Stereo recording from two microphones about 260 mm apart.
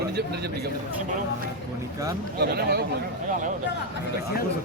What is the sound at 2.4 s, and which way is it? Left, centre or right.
Speech, right.